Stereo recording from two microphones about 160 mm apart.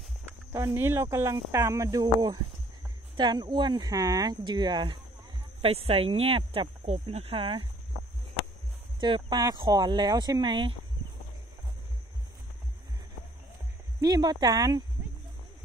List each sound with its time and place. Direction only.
0.5 s speech: 15° right (ahead or behind); by 7.6 s 35° right (ahead or behind)
9.0 s speech: 30° right (ahead or behind)
14.0 s speech: 25° right (ahead or behind)